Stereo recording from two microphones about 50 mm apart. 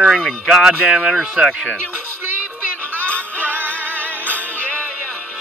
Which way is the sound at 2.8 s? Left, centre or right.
Left.